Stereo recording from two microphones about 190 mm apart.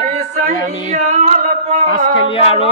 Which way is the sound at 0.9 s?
40° right (ahead or behind).